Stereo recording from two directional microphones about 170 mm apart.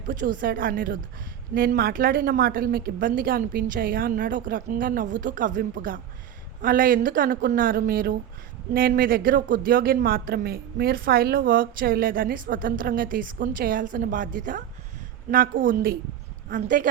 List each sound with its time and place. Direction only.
0.1 s speech: 55° right (ahead or behind)